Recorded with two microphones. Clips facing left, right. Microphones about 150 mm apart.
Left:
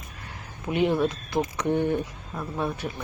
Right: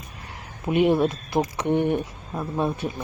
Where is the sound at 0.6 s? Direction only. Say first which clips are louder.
Right 4 dB; 20° right (ahead or behind).